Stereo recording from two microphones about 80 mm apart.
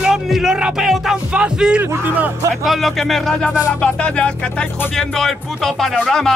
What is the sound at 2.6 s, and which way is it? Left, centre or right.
Music, centre.